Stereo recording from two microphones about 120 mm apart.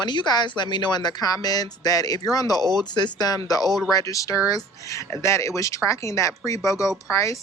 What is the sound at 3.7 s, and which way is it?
Speech, centre (ahead or behind).